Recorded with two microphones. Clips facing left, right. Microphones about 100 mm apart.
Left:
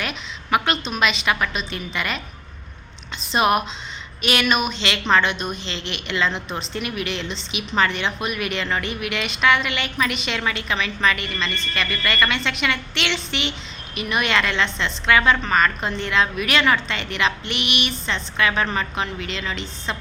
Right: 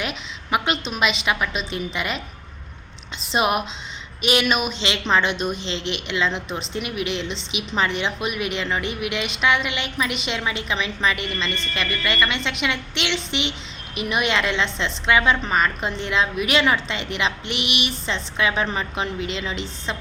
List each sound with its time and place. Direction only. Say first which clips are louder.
0.0 s a woman's voice: even; 15° right (ahead or behind)
3.3 s a woman's voice: left 2 dB; 15° right (ahead or behind)